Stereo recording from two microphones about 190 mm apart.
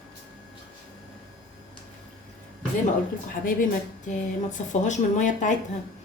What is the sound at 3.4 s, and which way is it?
A woman's voice, 45° left (ahead or behind).